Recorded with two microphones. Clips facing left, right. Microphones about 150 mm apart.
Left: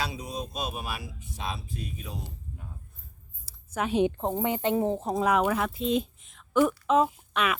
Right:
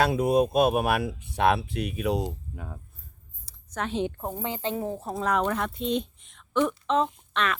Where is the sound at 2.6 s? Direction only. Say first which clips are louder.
Right 6 dB; 80° right.